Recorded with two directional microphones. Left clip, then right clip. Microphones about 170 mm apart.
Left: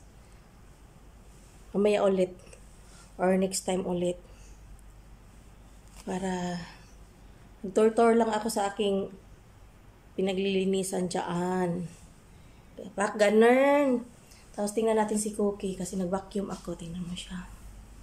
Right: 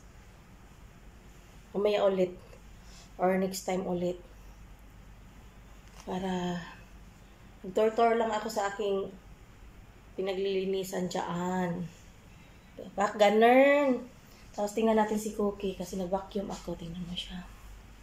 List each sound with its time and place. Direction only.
1.7 s speech: 10° left (ahead or behind)
5.9 s speech: 10° left (ahead or behind)
7.7 s speech: 15° left (ahead or behind)
10.1 s speech: 15° left (ahead or behind)
12.9 s a woman's voice: 5° left (ahead or behind)